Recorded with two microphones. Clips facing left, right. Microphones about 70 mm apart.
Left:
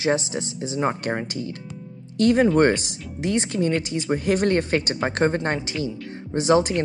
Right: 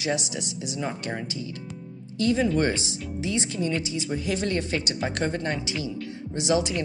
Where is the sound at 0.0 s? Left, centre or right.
Left.